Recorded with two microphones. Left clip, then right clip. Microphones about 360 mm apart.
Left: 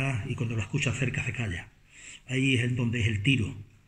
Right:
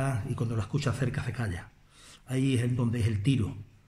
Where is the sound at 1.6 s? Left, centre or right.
Centre.